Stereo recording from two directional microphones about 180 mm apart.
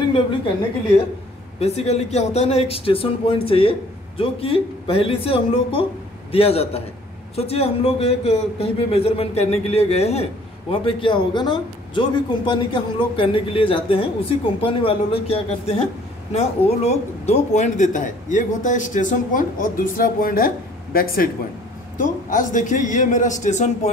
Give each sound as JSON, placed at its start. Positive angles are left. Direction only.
{"t": 1.6, "sound": "a man's voice", "side_deg": 35}